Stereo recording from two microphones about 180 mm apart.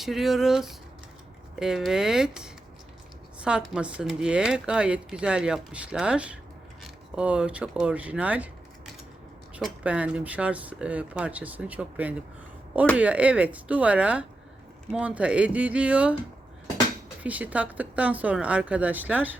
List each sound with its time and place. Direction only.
0.0 s speech: centre (ahead or behind)
9.6 s speech: 5° right (ahead or behind)
17.2 s speech: 10° right (ahead or behind)